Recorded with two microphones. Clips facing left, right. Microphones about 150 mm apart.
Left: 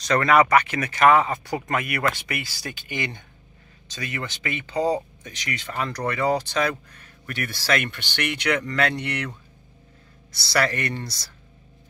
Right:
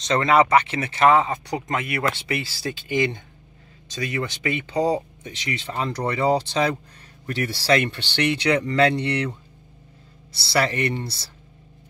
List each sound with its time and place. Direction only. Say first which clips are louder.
0.0 s speech: even; 25° right (ahead or behind)
10.3 s speech: right 1 dB; 25° right (ahead or behind)